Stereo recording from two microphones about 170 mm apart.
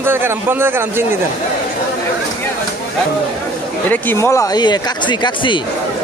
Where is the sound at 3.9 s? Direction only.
10° left (ahead or behind); by 5.6 s 30° left (ahead or behind).